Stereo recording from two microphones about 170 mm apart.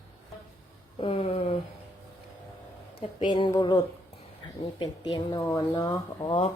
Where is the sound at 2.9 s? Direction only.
30° left (ahead or behind).